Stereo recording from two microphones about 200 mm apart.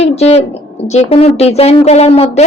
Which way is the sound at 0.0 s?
30° left (ahead or behind).